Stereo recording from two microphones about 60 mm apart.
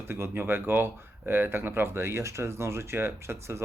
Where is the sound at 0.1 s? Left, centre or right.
Right.